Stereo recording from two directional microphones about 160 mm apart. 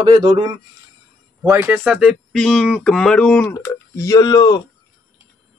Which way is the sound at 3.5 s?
20° left (ahead or behind).